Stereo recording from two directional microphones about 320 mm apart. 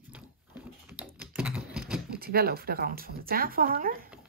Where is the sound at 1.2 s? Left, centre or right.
Centre.